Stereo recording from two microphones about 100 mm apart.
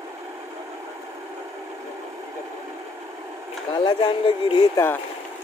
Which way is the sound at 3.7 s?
50° left (ahead or behind).